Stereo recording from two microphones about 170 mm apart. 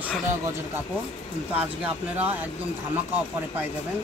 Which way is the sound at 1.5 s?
10° right (ahead or behind).